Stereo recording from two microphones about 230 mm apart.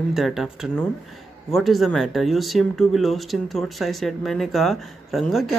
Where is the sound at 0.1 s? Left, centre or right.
Centre.